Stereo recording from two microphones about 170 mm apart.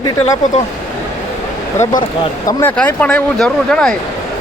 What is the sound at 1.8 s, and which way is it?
Speech, 25° left (ahead or behind).